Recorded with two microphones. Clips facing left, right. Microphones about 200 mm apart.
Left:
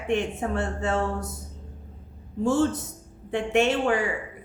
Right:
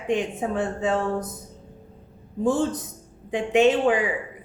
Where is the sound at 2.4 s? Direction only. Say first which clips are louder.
Even; 15° right (ahead or behind).